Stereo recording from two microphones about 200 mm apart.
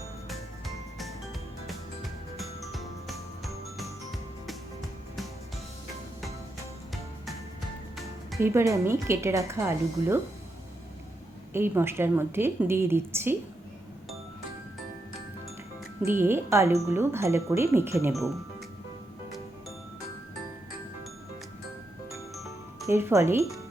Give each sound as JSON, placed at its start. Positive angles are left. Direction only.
{"t": 0.3, "sound": "music", "side_deg": 0}
{"t": 8.4, "sound": "a woman's voice", "side_deg": -15}
{"t": 11.5, "sound": "a woman's voice", "side_deg": -10}
{"t": 16.0, "sound": "a woman's voice", "side_deg": -10}
{"t": 22.1, "sound": "music", "side_deg": 0}
{"t": 22.9, "sound": "a woman's voice", "side_deg": -10}